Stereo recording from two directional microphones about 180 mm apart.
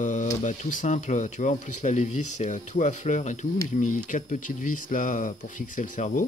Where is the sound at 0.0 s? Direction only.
45° left (ahead or behind).